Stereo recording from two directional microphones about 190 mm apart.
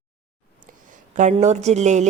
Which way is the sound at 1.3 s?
35° right (ahead or behind).